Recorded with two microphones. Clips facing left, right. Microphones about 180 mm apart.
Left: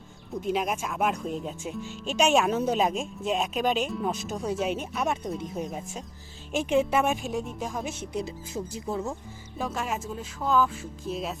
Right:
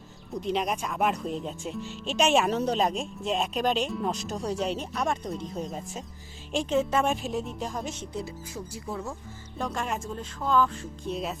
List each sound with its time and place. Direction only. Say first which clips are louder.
0.3 s speech: left 1 dB; centre (ahead or behind)
8.1 s speech: left 3 dB; 20° left (ahead or behind)
9.6 s speech: even; 5° left (ahead or behind)